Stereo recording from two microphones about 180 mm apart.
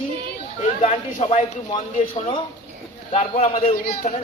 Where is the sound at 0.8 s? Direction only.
35° left (ahead or behind).